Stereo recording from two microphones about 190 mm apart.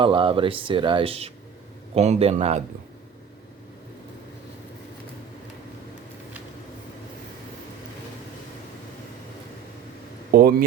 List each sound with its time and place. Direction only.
0.0 s a man's voice: 25° right (ahead or behind)
10.3 s speech: 55° right (ahead or behind)